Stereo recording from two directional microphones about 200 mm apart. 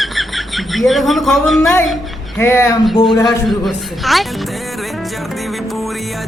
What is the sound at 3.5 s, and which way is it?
Speech, centre (ahead or behind).